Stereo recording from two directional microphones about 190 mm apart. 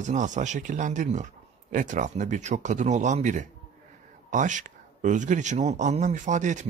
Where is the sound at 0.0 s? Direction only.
40° right (ahead or behind).